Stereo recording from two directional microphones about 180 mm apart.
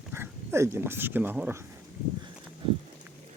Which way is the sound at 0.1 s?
15° right (ahead or behind).